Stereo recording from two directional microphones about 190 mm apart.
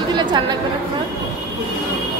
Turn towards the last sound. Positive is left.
turn(degrees=-25)  # may be behind; listen again after turning